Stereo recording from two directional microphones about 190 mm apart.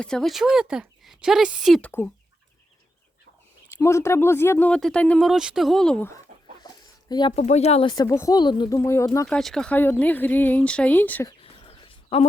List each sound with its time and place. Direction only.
0.0 s speech: 5° left (ahead or behind)
3.7 s speech: 15° left (ahead or behind)
7.3 s speech: 35° left (ahead or behind)
8.8 s speech: 15° left (ahead or behind)
9.2 s speech: 5° left (ahead or behind)
11.3 s a sound: 30° left (ahead or behind)